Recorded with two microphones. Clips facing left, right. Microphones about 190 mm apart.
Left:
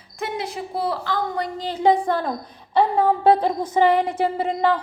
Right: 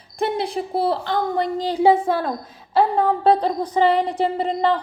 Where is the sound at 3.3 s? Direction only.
10° left (ahead or behind).